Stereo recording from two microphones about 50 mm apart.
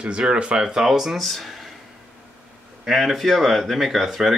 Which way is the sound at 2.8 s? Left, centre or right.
Centre.